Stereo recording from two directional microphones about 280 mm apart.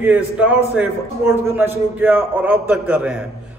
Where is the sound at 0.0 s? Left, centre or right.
Centre.